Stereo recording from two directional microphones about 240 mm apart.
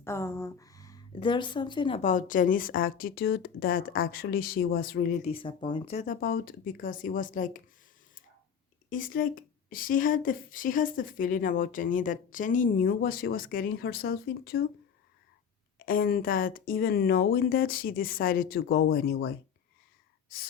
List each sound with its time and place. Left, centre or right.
0.0 s speech: centre; by 5.1 s left
5.2 s speech: left
8.9 s speech: left
15.9 s speech: left